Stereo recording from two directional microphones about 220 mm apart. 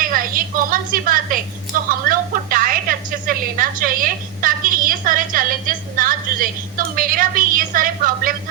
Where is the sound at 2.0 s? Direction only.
40° right (ahead or behind).